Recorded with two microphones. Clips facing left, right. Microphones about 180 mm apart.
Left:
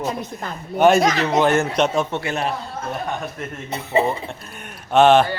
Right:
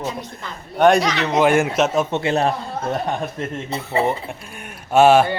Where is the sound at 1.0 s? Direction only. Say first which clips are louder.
Left 3 dB; 45° left (ahead or behind).